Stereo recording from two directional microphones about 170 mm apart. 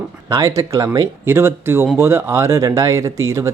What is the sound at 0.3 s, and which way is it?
Speech, 20° right (ahead or behind).